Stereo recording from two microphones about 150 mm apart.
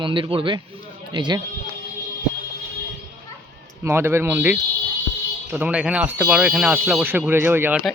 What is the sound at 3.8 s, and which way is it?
Speech, 15° right (ahead or behind).